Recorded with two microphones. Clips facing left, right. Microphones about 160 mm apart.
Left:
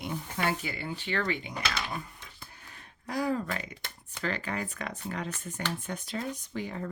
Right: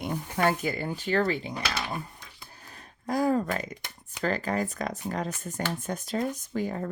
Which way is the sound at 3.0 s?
45° right (ahead or behind).